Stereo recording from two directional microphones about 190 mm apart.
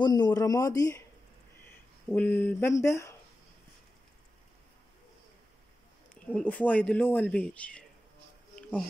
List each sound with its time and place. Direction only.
0.0 s a man's voice: 20° left (ahead or behind)
2.0 s speech: 10° left (ahead or behind)
6.3 s speech: 5° left (ahead or behind)
8.5 s music: 5° left (ahead or behind)